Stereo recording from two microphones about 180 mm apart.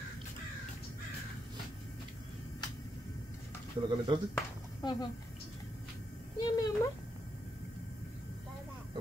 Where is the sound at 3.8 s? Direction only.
25° right (ahead or behind).